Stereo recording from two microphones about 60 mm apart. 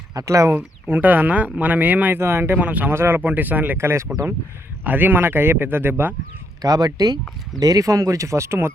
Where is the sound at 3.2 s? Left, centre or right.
Right.